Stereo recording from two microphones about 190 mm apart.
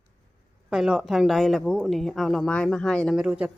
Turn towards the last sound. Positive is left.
turn(degrees=-5)  # may be behind; listen again after turning